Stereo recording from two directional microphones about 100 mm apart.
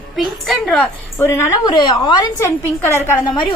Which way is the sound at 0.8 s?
25° left (ahead or behind).